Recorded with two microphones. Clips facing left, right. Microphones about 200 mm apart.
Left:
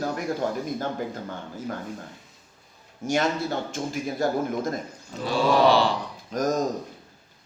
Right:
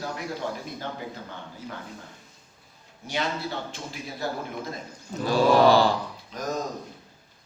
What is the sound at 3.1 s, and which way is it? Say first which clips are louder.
A man's voice: left 5 dB; 45° left (ahead or behind).